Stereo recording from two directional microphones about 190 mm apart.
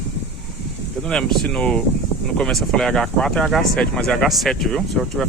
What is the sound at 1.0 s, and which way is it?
Speech, 5° left (ahead or behind).